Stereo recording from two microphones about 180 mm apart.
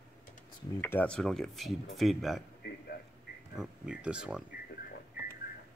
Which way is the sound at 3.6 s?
5° right (ahead or behind).